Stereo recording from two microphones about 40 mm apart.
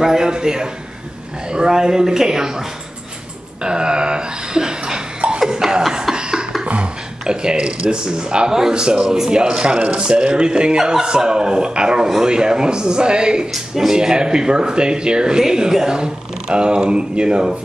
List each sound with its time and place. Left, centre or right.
0.0 s speech: centre
3.6 s burping: right
5.5 s a sound: centre
6.1 s a sound: right
6.6 s speech: right
13.5 s speech: centre